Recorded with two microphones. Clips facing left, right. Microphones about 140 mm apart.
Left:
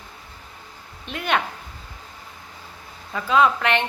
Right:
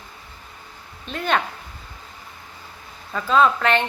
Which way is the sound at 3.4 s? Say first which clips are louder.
Right 1 dB; 40° right (ahead or behind).